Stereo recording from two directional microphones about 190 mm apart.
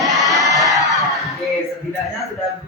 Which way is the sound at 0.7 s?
Centre (ahead or behind).